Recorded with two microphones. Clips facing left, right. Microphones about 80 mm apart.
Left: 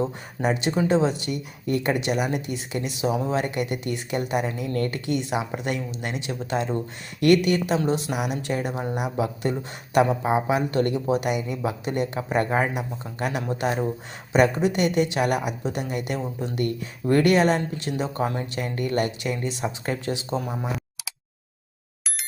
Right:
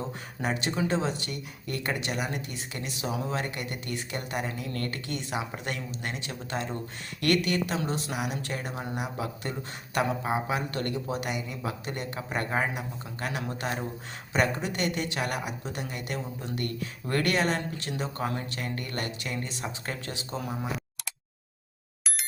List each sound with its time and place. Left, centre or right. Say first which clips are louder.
0.4 s a woman's voice: left 6 dB; centre
8.8 s speech: left 6 dB; centre
9.1 s a woman's voice: left 8 dB; centre